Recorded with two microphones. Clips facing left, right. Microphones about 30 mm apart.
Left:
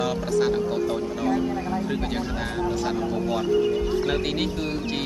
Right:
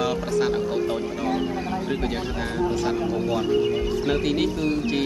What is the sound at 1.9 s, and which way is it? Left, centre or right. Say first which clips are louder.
Speech: right 1 dB; centre.